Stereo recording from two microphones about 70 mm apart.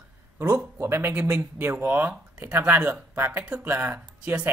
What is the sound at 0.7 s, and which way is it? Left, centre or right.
Speech, right.